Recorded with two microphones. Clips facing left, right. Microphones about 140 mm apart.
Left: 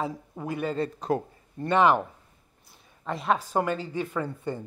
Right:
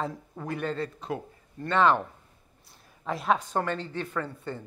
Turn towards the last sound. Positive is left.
turn(degrees=10)  # may be behind; listen again after turning